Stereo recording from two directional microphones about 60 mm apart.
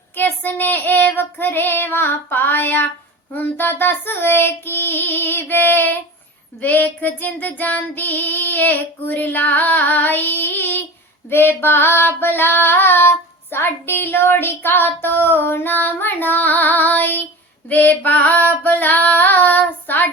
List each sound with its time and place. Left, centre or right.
0.2 s child singing: left
17.7 s female singing: left